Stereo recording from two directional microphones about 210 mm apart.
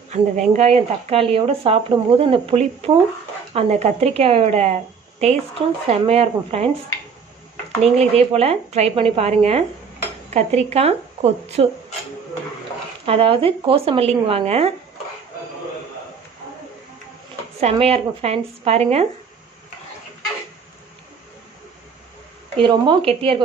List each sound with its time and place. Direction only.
0.1 s a woman's voice: 35° right (ahead or behind)
8.0 s speech: 30° right (ahead or behind)
13.0 s speech: 25° right (ahead or behind)
17.6 s speech: 30° right (ahead or behind)
22.6 s speech: 25° right (ahead or behind)